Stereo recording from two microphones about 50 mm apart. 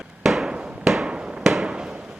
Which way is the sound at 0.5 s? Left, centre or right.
Right.